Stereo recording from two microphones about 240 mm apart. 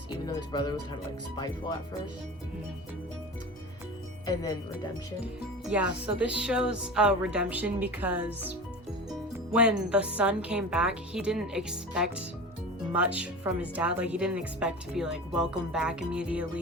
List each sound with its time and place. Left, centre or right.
0.3 s speech: centre
5.2 s speech: centre